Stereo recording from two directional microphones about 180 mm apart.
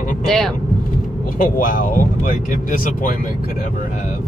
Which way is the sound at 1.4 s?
50° left (ahead or behind).